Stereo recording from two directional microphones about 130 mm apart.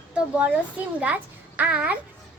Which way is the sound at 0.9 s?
10° right (ahead or behind).